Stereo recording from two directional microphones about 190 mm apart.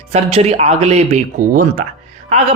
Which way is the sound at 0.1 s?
35° right (ahead or behind).